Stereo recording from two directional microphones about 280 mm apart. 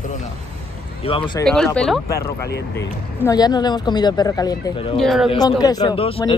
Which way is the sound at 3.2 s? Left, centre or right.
Centre.